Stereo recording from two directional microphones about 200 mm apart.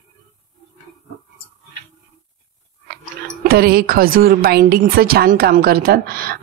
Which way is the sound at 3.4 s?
50° right (ahead or behind).